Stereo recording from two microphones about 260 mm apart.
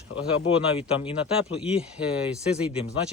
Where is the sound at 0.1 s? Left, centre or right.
Left.